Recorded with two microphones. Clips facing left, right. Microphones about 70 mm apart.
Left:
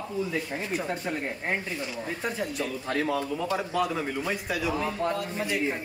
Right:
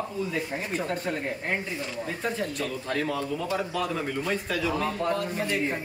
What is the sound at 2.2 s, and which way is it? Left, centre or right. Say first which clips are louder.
Speech: right 1 dB; centre.